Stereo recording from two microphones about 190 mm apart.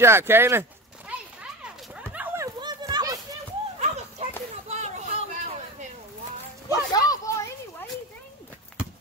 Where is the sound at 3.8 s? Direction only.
35° right (ahead or behind).